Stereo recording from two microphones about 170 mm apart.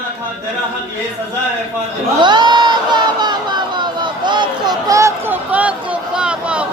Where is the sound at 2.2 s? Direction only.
25° right (ahead or behind).